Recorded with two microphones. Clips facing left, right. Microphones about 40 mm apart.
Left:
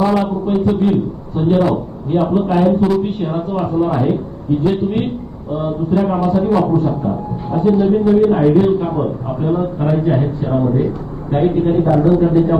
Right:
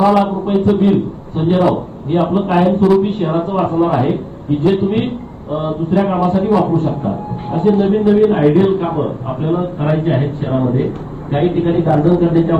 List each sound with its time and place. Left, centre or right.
0.2 s a man's voice: right
2.9 s a man's voice: right